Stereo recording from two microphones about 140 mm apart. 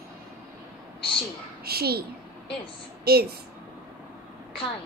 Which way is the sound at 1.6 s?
90° right.